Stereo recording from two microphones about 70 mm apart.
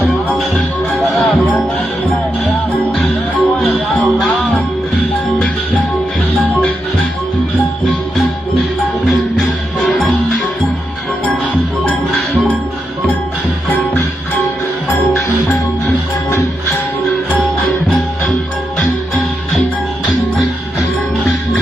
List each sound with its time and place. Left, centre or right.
0.3 s music: centre
3.6 s music: centre
18.8 s music: centre